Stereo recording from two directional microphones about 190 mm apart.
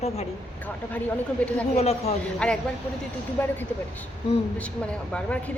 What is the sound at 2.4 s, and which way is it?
A woman's voice, 5° left (ahead or behind).